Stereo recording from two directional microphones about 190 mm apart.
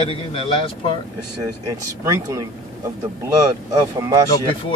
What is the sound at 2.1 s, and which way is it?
Speech, 15° right (ahead or behind).